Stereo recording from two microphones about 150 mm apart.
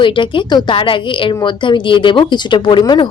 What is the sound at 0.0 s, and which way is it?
Speech, 35° left (ahead or behind).